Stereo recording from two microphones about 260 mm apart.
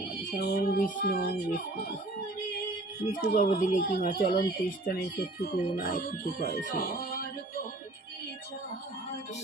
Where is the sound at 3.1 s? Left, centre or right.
Left.